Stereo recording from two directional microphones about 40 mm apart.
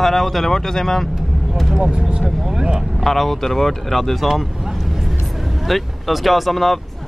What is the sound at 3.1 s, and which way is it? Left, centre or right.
Speech, centre.